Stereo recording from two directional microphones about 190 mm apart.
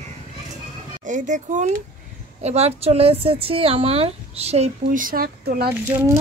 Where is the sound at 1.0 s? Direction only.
40° right (ahead or behind).